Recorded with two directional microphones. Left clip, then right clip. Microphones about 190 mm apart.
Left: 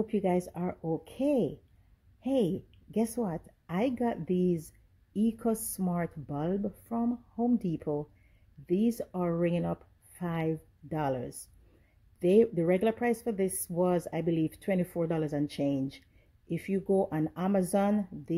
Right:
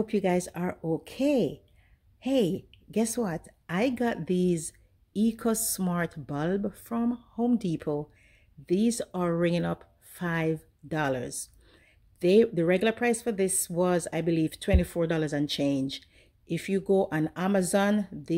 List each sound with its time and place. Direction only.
0.0 s a woman's voice: 5° right (ahead or behind)